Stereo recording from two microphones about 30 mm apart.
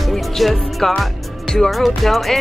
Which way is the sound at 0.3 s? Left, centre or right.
Centre.